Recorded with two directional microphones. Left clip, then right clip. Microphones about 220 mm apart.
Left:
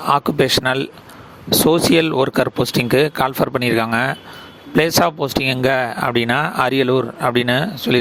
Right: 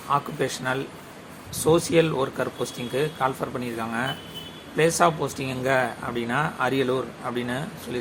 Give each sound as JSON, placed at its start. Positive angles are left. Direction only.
{"t": 0.1, "sound": "speech", "side_deg": 45}